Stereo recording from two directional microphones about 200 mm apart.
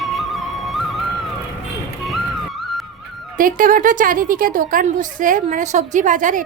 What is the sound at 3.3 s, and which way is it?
A woman's voice, 45° right (ahead or behind).